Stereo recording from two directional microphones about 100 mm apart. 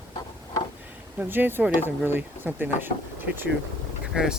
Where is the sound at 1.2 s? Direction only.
20° right (ahead or behind).